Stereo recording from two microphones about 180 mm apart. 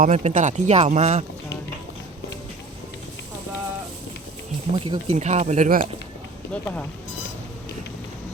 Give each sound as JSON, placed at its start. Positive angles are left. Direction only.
{"t": 0.0, "sound": "speech", "side_deg": -40}
{"t": 4.7, "sound": "speech", "side_deg": -30}
{"t": 5.1, "sound": "speech", "side_deg": -40}
{"t": 6.5, "sound": "speech", "side_deg": 10}